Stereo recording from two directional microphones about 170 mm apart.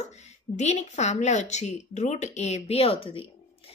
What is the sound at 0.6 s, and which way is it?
A woman's voice, 40° left (ahead or behind).